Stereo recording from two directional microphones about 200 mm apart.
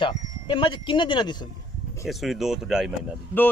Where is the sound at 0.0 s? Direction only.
25° left (ahead or behind).